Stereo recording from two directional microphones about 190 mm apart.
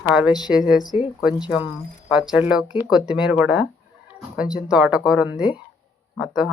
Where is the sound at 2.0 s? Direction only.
5° right (ahead or behind).